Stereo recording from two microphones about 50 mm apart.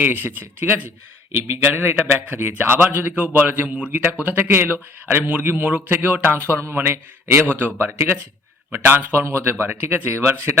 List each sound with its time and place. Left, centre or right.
0.0 s a man's voice: right
1.5 s a man's voice: right
9.2 s speech: right